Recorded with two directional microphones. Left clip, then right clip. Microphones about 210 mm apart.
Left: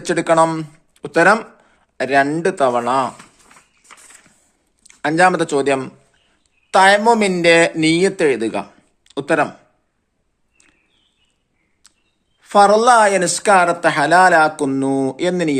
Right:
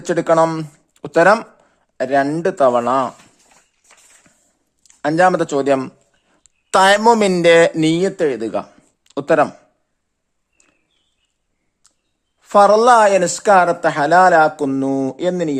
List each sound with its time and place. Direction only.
0.0 s speech: 40° right (ahead or behind)
4.8 s speech: 40° right (ahead or behind)
6.4 s speech: 50° right (ahead or behind)
10.6 s a sound: 40° right (ahead or behind)
12.4 s speech: 40° right (ahead or behind)